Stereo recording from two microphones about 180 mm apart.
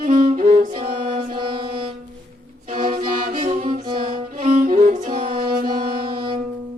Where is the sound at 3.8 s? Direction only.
25° right (ahead or behind).